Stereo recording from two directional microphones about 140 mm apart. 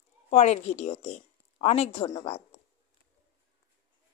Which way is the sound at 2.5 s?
45° left (ahead or behind).